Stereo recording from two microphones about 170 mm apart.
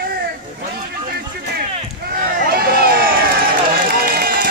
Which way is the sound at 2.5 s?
65° right (ahead or behind).